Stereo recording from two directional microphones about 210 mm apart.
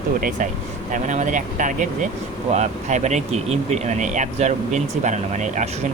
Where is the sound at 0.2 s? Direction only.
40° right (ahead or behind).